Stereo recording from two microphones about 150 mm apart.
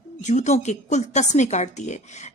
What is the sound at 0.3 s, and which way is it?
Speech, 50° left (ahead or behind).